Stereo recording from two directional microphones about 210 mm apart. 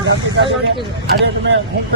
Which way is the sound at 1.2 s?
55° right (ahead or behind).